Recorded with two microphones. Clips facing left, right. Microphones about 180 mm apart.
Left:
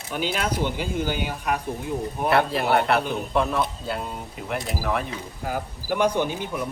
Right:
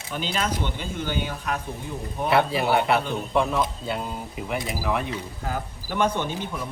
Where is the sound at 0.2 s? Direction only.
10° left (ahead or behind).